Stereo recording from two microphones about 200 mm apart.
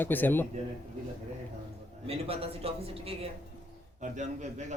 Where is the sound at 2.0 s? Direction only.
30° right (ahead or behind).